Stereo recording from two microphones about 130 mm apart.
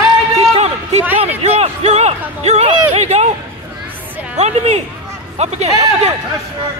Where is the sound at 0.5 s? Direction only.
55° right (ahead or behind).